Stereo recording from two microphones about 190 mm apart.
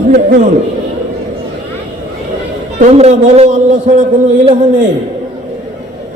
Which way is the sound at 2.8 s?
35° right (ahead or behind).